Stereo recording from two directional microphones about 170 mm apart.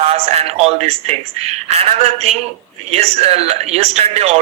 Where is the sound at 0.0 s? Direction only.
35° right (ahead or behind).